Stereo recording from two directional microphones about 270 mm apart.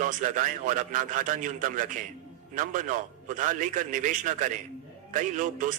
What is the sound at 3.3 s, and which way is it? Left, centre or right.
A man's voice, right.